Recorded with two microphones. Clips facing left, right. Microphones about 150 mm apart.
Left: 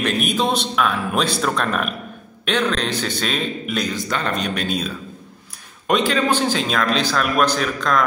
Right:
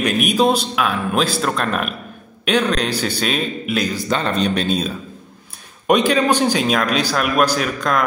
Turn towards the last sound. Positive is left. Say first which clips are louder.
# right 1 dB
turn(degrees=-10)  # may be behind; listen again after turning